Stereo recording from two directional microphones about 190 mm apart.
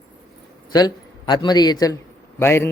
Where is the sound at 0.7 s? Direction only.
20° left (ahead or behind).